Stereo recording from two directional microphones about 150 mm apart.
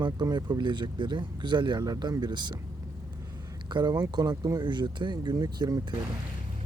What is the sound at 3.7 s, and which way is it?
Speech, 30° right (ahead or behind).